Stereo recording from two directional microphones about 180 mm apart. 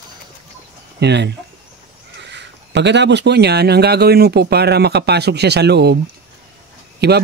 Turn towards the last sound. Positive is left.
turn(degrees=-65)  # may be behind; listen again after turning